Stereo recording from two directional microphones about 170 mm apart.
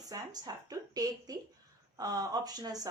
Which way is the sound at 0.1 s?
20° right (ahead or behind).